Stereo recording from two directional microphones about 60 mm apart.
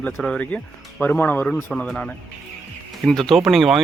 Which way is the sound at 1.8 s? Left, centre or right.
Centre.